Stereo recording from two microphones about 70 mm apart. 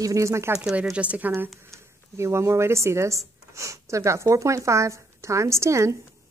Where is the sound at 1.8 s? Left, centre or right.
Right.